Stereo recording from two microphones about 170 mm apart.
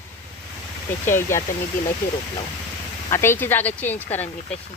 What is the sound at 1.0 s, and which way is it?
Speech, 15° left (ahead or behind).